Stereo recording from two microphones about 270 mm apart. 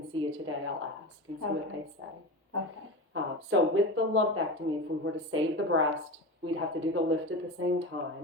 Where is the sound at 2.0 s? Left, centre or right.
Right.